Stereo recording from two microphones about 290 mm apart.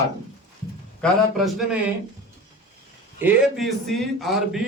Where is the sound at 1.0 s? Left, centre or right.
Centre.